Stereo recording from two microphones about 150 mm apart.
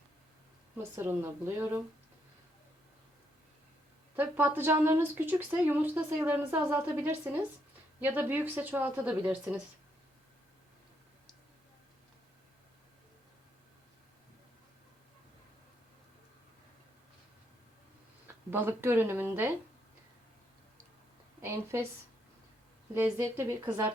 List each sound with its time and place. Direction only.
0.8 s speech: 15° right (ahead or behind)
4.1 s speech: 15° right (ahead or behind)
18.3 s speech: 15° right (ahead or behind)
21.4 s speech: 15° right (ahead or behind)
23.0 s speech: 15° right (ahead or behind)